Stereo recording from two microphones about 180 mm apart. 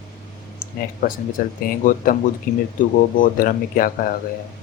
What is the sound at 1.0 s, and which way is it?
Speech, 45° left (ahead or behind).